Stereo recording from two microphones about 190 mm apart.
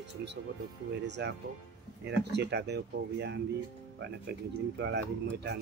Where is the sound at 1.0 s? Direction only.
65° right (ahead or behind).